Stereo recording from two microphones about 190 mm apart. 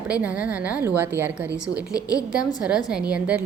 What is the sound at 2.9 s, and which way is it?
Speech, 5° right (ahead or behind).